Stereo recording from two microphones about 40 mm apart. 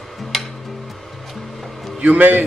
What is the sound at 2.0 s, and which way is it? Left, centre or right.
Speech, right.